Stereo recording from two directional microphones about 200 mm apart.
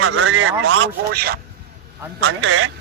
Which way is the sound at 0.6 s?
80° right.